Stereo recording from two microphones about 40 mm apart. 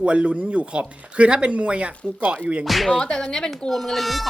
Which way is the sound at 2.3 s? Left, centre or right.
Right.